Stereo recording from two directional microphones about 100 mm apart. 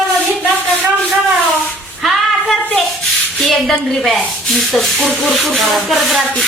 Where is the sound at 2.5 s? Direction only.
15° left (ahead or behind).